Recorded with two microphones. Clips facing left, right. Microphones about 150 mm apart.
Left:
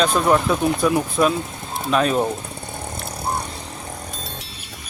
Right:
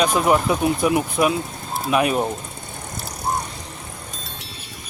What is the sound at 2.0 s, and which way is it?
Speech, 10° right (ahead or behind).